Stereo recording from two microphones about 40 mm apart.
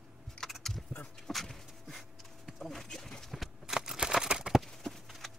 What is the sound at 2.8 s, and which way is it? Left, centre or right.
Clip-clop, centre.